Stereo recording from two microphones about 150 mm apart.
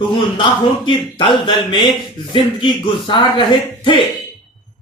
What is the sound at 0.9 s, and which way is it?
Speech, 35° left (ahead or behind).